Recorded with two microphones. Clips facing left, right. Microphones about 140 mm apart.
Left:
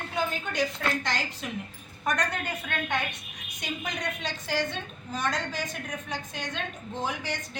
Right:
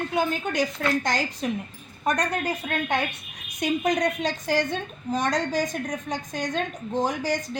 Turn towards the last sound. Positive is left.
turn(degrees=-40)  # may be behind; listen again after turning